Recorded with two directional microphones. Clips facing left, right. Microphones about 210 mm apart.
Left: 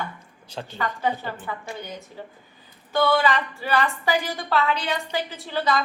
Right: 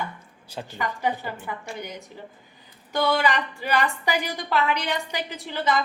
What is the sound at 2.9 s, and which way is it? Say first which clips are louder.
A woman's voice: left 2 dB; 15° right (ahead or behind).